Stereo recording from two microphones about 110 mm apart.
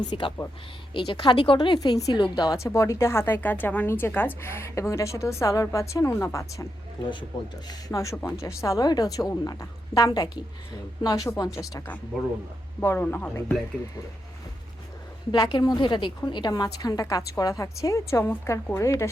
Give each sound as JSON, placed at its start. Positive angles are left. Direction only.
{"t": 0.1, "sound": "a woman's voice", "side_deg": 45}
{"t": 7.3, "sound": "a woman's voice", "side_deg": 45}
{"t": 7.7, "sound": "a woman's voice", "side_deg": 30}
{"t": 12.8, "sound": "a woman's voice", "side_deg": 20}
{"t": 15.5, "sound": "a woman's voice", "side_deg": 40}